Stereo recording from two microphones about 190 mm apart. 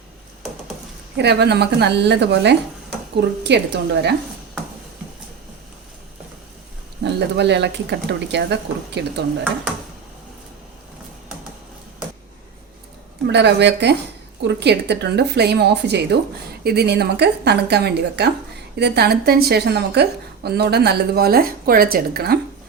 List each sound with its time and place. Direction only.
1.1 s a woman's voice: 60° right (ahead or behind)
7.0 s a woman's voice: 60° right (ahead or behind)
13.2 s a woman's voice: 65° right (ahead or behind)